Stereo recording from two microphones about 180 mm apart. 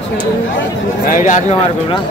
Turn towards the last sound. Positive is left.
turn(degrees=50)  # may be behind; listen again after turning